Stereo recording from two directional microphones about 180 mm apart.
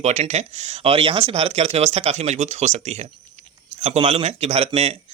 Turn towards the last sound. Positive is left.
turn(degrees=-35)  # may be behind; listen again after turning